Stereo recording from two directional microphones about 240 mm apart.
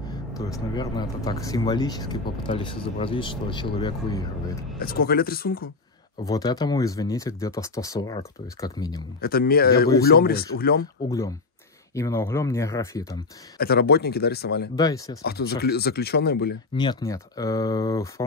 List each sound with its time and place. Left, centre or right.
0.4 s speech: centre
5.0 s speech: left
6.2 s speech: centre
9.2 s speech: left
11.1 s speech: centre
13.6 s speech: left
14.8 s speech: centre
15.2 s speech: left
16.7 s speech: centre